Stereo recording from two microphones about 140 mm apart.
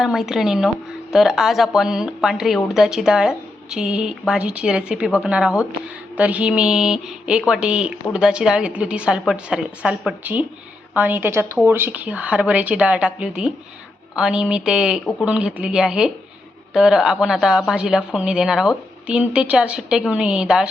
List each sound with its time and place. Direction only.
0.0 s speech: centre (ahead or behind)